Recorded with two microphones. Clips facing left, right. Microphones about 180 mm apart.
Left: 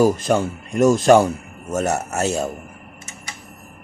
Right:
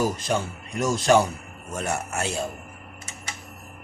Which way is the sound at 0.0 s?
50° left (ahead or behind).